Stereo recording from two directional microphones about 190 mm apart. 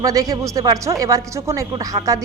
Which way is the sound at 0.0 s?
15° right (ahead or behind).